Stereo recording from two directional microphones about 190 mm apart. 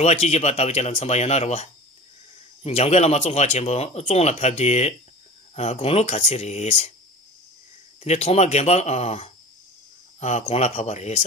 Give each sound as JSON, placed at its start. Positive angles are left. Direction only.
{"t": 0.0, "sound": "speech", "side_deg": 35}
{"t": 8.0, "sound": "speech", "side_deg": 35}